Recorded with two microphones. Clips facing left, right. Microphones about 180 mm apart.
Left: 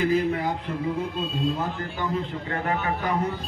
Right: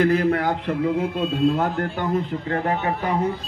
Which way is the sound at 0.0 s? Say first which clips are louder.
Right 4 dB; 70° right (ahead or behind).